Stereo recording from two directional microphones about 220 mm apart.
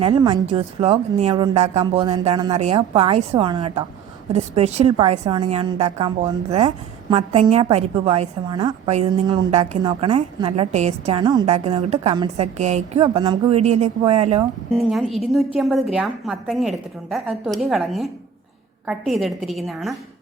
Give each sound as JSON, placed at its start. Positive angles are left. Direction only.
{"t": 0.0, "sound": "a woman's voice", "side_deg": -20}
{"t": 14.7, "sound": "a woman's voice", "side_deg": 0}